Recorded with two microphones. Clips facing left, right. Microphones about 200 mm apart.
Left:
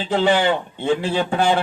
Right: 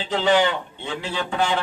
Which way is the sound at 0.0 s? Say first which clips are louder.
Left 2 dB; 45° left (ahead or behind).